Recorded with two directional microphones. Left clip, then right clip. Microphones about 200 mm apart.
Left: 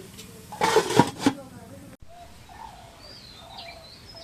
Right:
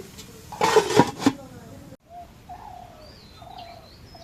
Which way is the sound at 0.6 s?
Centre (ahead or behind).